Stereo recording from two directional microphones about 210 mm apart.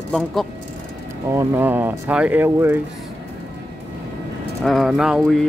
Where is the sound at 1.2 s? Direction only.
10° right (ahead or behind).